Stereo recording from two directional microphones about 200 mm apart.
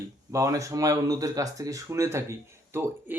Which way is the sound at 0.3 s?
15° right (ahead or behind).